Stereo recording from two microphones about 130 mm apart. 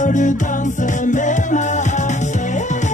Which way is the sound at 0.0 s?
75° left (ahead or behind).